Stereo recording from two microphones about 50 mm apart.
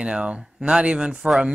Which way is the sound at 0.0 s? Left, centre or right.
Centre.